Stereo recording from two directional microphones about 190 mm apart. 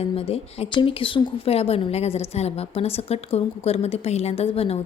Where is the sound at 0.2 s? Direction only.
30° left (ahead or behind).